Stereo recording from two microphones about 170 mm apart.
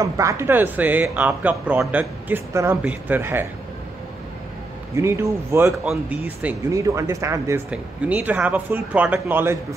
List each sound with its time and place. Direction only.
0.0 s speech: 20° right (ahead or behind)
4.9 s speech: 15° right (ahead or behind)
5.7 s speech: 5° right (ahead or behind)